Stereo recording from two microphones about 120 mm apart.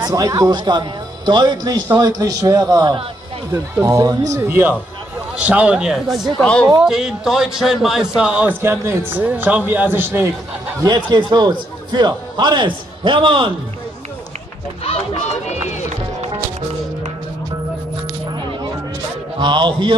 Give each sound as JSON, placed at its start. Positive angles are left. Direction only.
{"t": 0.0, "sound": "speech", "side_deg": -30}
{"t": 6.9, "sound": "a man's voice", "side_deg": -5}
{"t": 10.8, "sound": "speech", "side_deg": -35}
{"t": 14.8, "sound": "run", "side_deg": 60}
{"t": 19.4, "sound": "speech", "side_deg": -40}